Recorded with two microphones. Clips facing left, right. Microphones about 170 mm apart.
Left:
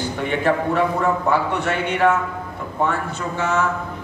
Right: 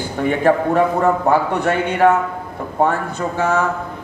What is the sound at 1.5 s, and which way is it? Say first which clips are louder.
Speech: right 4 dB; 55° right (ahead or behind).